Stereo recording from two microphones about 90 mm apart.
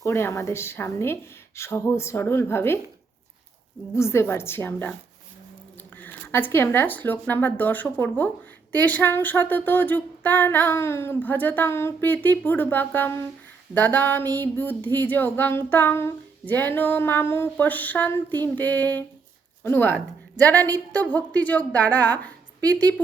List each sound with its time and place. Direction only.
0.0 s speech: 30° left (ahead or behind)
3.9 s speech: 30° left (ahead or behind)
6.0 s speech: 20° left (ahead or behind)
20.6 s a woman's voice: 45° right (ahead or behind)
20.9 s a woman's voice: 20° left (ahead or behind)